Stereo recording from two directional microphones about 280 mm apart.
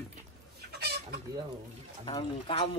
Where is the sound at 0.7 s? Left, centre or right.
Right.